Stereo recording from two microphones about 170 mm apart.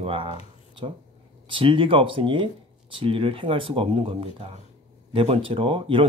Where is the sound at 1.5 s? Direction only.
30° right (ahead or behind).